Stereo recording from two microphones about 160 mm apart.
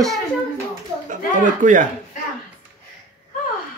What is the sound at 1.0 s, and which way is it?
Speech, 55° right (ahead or behind).